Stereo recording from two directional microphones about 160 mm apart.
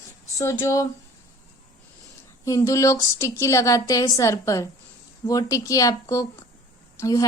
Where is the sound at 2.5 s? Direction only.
20° left (ahead or behind).